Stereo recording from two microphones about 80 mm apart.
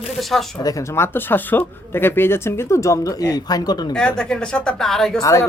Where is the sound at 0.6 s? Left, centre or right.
Left.